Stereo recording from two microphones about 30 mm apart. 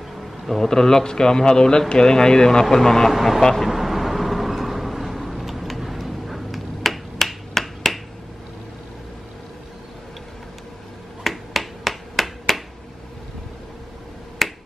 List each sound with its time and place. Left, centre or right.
0.6 s speech: centre
3.1 s speech: centre
3.6 s vehicle: centre
11.2 s finger snapping: centre
14.4 s finger snapping: centre